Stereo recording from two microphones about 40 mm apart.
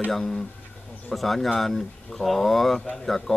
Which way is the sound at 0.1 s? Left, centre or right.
Centre.